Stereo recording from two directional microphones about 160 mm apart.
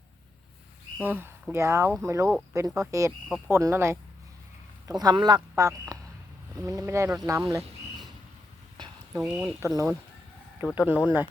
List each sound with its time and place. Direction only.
0.9 s speech: 10° right (ahead or behind)
3.2 s speech: centre (ahead or behind)
3.5 s speech: 15° right (ahead or behind)
9.2 s speech: 5° right (ahead or behind)
9.6 s speech: 20° right (ahead or behind)